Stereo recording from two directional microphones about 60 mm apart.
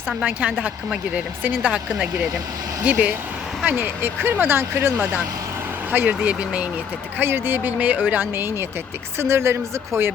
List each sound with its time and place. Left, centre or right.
0.3 s speech: right
1.7 s speech: centre; by 5.2 s right
5.9 s speech: right
7.2 s a woman's voice: right